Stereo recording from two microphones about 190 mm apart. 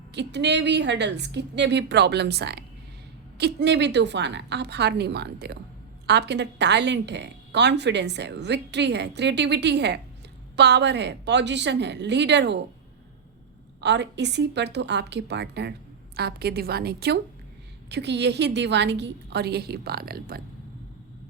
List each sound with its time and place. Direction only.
0.1 s a woman's voice: 65° right (ahead or behind)
13.8 s a woman's voice: 65° right (ahead or behind)